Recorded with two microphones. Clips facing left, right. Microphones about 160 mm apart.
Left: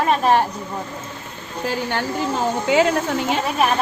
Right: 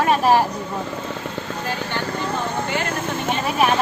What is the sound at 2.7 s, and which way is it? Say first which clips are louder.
Speech: left 7 dB; 90° left.